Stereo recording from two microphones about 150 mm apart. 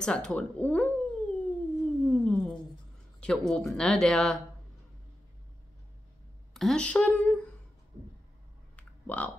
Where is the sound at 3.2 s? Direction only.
5° left (ahead or behind).